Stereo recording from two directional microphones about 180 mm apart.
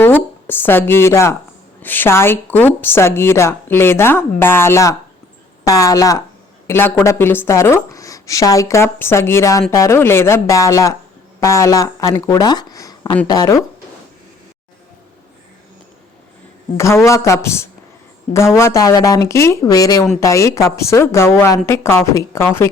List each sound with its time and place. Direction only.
0.0 s a woman's voice: 10° left (ahead or behind)
16.7 s a woman's voice: 15° left (ahead or behind)